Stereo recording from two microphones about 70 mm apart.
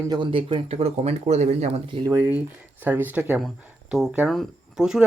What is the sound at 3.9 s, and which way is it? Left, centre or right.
Speech, centre.